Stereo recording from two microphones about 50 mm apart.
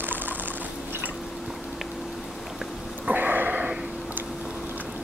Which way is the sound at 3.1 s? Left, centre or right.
Right.